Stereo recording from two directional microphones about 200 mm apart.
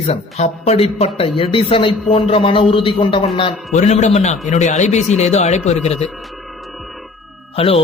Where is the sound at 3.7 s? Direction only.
35° left (ahead or behind).